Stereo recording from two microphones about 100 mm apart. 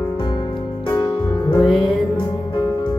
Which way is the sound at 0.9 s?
55° left (ahead or behind).